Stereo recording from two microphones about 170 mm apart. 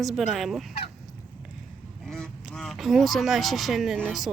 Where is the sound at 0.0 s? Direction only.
Centre (ahead or behind).